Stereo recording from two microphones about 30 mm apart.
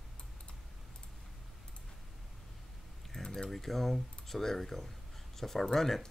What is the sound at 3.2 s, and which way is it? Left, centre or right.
Typing, centre.